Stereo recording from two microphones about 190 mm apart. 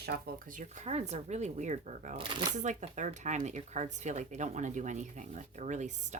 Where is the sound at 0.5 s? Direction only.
40° right (ahead or behind).